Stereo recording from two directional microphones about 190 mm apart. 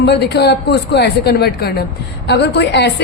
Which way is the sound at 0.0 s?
60° left (ahead or behind).